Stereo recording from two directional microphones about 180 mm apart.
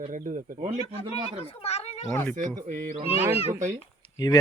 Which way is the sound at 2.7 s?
50° right (ahead or behind).